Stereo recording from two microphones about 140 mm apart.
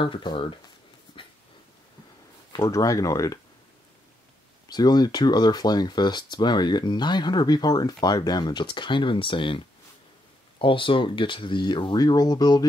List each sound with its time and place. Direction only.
0.0 s speech: 35° left (ahead or behind)
1.2 s dog: 40° left (ahead or behind)
2.5 s speech: 25° left (ahead or behind)
4.6 s speech: 30° left (ahead or behind)
10.6 s speech: 35° left (ahead or behind)